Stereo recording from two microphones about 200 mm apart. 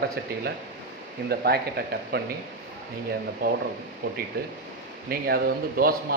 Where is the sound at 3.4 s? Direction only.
45° right (ahead or behind).